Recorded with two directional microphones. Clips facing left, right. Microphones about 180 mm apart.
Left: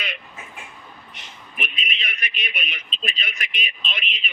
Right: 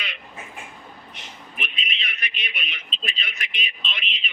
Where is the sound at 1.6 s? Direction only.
50° left (ahead or behind).